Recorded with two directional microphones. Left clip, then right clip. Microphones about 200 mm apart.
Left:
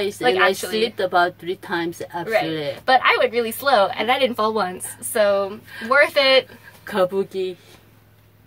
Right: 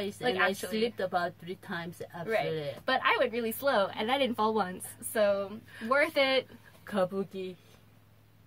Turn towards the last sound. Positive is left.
turn(degrees=15)  # may be behind; listen again after turning